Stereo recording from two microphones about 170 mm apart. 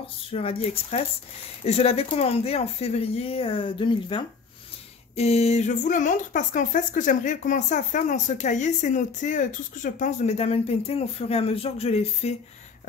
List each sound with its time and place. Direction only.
0.3 s speech: 35° left (ahead or behind)